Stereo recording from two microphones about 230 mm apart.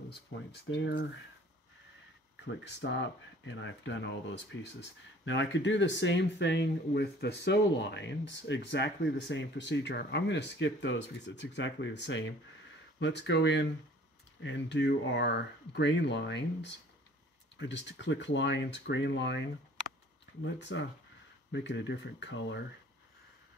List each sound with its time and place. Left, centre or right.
0.5 s speech: left
2.6 s speech: left
20.5 s speech: left